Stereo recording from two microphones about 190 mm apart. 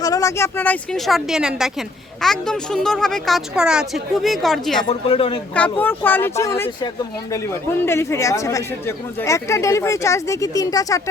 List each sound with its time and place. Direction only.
0.0 s a woman's voice: 20° left (ahead or behind); by 4.8 s centre (ahead or behind)
4.8 s speech: 30° left (ahead or behind)
5.5 s speech: 10° left (ahead or behind)
7.7 s speech: 10° left (ahead or behind)